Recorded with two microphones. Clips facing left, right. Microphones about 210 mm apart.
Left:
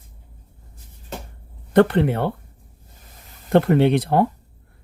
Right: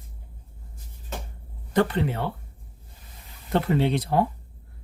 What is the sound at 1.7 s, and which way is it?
Speech, 60° left (ahead or behind).